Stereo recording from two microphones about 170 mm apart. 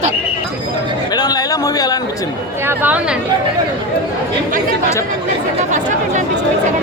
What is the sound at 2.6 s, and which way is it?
Speech, 10° right (ahead or behind).